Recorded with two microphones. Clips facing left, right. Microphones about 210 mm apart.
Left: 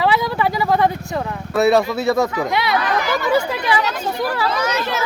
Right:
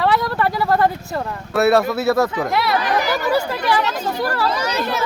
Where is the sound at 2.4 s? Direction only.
Centre (ahead or behind).